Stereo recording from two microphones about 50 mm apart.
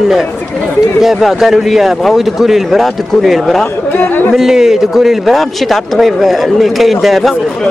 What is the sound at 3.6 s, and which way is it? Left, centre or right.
Speech, left.